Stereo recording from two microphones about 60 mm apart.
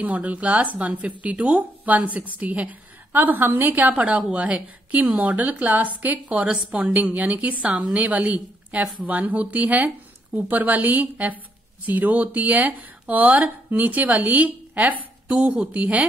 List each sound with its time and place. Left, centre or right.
0.0 s speech: right